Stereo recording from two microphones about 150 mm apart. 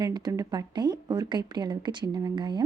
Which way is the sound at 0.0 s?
25° right (ahead or behind).